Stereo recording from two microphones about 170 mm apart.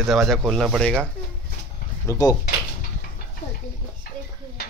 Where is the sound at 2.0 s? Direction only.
20° left (ahead or behind).